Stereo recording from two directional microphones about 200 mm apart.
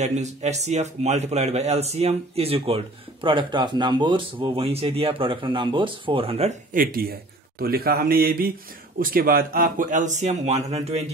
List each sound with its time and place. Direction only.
0.0 s a man's voice: 35° right (ahead or behind)
6.7 s a man's voice: 45° right (ahead or behind)